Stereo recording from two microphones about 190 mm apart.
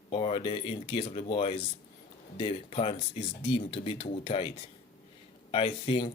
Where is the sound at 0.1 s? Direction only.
30° left (ahead or behind).